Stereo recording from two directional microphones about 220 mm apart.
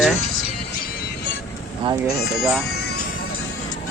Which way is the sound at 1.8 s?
20° right (ahead or behind).